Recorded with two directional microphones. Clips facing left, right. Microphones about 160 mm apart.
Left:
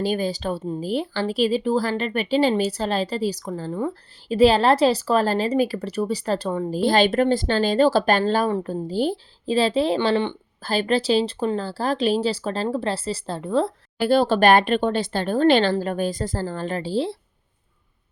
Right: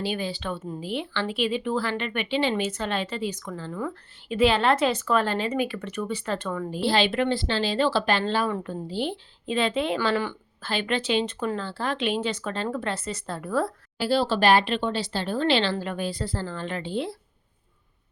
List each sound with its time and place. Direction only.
0.0 s speech: 40° left (ahead or behind)
10.6 s speech: 40° left (ahead or behind)
14.0 s speech: 50° left (ahead or behind); by 17.2 s 30° left (ahead or behind)